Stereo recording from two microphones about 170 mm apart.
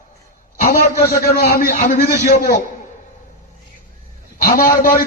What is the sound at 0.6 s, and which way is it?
A man's voice, 55° left (ahead or behind).